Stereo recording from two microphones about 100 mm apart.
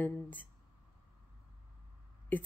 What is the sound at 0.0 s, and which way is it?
Speech, 15° left (ahead or behind).